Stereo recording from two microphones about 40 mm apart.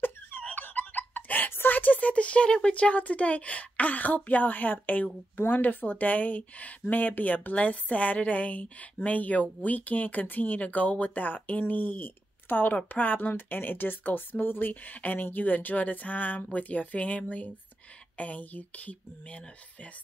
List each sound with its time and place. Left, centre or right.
0.4 s a sound: left
0.7 s a woman's voice: left
13.3 s speech: left
14.7 s a woman's voice: left